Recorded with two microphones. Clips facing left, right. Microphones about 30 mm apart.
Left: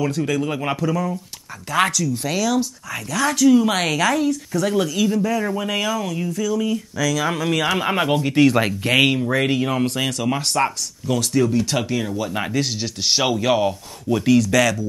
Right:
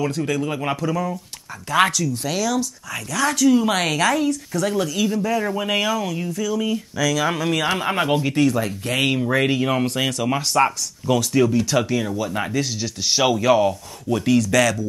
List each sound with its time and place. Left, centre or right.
0.0 s a woman's voice: centre
8.5 s speech: left
9.1 s a woman's voice: centre
11.7 s speech: centre
12.5 s speech: left
13.2 s a woman's voice: centre